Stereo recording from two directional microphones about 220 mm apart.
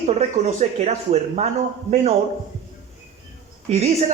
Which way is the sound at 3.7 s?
30° right (ahead or behind).